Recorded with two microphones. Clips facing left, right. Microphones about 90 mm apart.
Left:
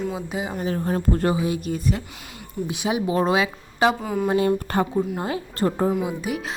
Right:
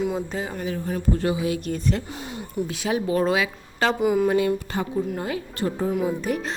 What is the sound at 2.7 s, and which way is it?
Speech, 20° left (ahead or behind).